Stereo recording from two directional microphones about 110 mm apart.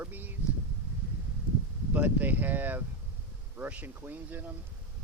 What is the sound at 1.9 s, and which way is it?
Speech, 15° right (ahead or behind).